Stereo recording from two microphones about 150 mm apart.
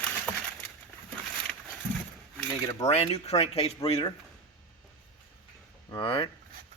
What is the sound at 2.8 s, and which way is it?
Speech, 45° left (ahead or behind).